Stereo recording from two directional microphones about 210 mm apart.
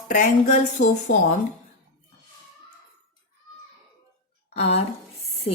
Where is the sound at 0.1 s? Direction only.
35° left (ahead or behind).